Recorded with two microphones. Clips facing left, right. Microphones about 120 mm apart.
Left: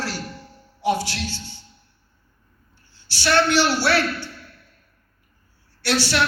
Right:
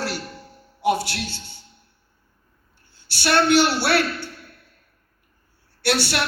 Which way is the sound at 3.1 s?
55° right (ahead or behind).